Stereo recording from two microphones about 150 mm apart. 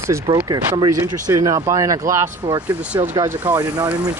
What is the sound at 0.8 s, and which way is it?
Speech, 20° right (ahead or behind).